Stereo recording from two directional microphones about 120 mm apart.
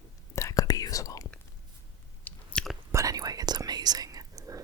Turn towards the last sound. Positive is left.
turn(degrees=-30)  # may be behind; listen again after turning